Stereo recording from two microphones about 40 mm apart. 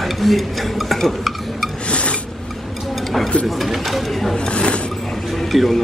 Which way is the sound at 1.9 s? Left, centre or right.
Left.